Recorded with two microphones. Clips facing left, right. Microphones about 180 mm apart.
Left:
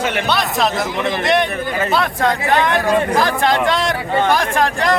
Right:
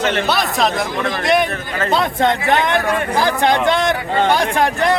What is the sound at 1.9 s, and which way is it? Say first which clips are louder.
Speech: right 3 dB; 20° right (ahead or behind).